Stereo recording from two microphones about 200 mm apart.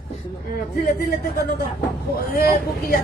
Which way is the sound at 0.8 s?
50° left (ahead or behind).